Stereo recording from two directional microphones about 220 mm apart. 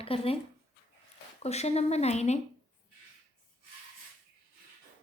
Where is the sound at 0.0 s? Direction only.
25° left (ahead or behind).